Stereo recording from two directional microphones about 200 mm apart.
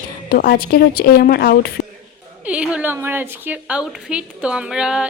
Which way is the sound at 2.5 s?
5° right (ahead or behind).